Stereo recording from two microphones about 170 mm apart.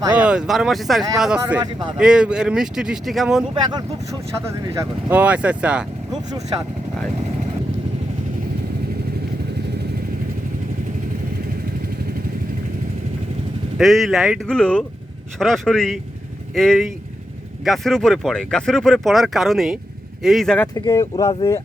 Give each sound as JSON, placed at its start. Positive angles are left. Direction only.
{"t": 0.1, "sound": "speech", "side_deg": -5}
{"t": 3.5, "sound": "speech", "side_deg": -25}
{"t": 13.7, "sound": "speech", "side_deg": 0}
{"t": 20.7, "sound": "speech", "side_deg": 20}